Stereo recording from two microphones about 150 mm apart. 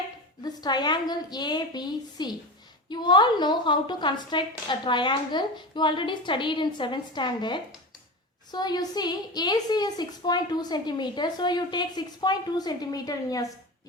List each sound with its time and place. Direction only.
0.4 s a woman's voice: 30° left (ahead or behind)